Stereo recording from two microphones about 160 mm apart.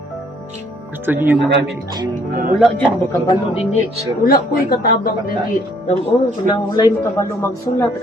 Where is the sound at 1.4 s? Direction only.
90° right.